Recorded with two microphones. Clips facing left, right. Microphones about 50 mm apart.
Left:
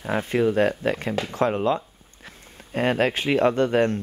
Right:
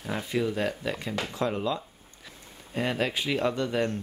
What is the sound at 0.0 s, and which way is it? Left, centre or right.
Speech, left.